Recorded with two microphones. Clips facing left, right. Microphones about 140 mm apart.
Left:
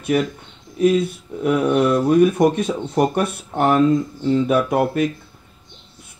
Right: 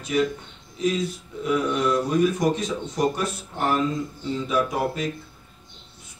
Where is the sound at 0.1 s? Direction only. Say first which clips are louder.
Even; 60° left (ahead or behind).